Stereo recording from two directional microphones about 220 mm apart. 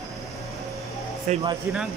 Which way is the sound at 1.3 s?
20° right (ahead or behind).